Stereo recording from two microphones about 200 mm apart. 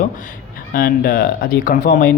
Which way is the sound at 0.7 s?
50° left (ahead or behind).